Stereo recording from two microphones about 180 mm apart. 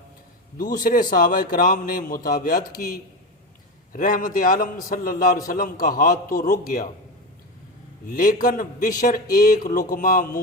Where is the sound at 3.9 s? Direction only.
50° left (ahead or behind).